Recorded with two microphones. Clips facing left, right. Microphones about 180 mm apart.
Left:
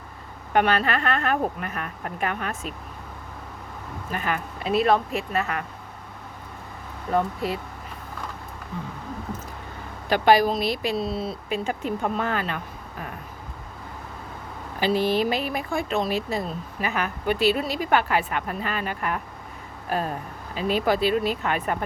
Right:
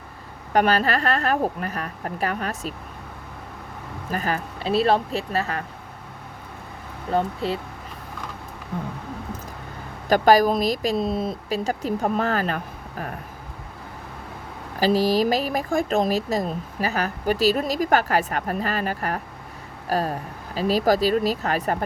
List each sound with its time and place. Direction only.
0.5 s speech: 40° right (ahead or behind)
4.1 s speech: 35° right (ahead or behind)
7.1 s speech: 30° right (ahead or behind)
8.7 s a sound: 55° right (ahead or behind)
10.1 s speech: 45° right (ahead or behind)
14.8 s speech: 40° right (ahead or behind)